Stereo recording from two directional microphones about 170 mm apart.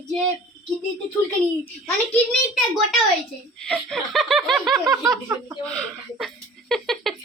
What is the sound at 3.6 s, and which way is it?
Speech, centre (ahead or behind).